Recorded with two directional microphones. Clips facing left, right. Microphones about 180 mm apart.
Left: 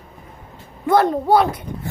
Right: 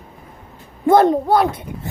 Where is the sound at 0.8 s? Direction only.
25° right (ahead or behind).